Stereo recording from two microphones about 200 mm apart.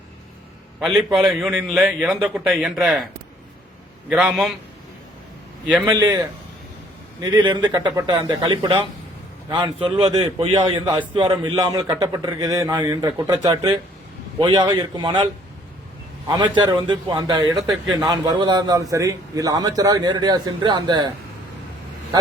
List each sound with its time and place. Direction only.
0.8 s a man's voice: centre (ahead or behind)
4.1 s a man's voice: 5° right (ahead or behind)
5.6 s a man's voice: 5° right (ahead or behind)
5.9 s a man's voice: 20° right (ahead or behind)
7.2 s a man's voice: 25° right (ahead or behind)
16.3 s a man's voice: 20° right (ahead or behind)